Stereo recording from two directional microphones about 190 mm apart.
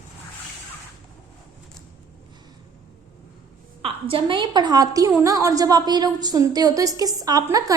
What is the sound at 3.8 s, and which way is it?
A woman's voice, 30° right (ahead or behind).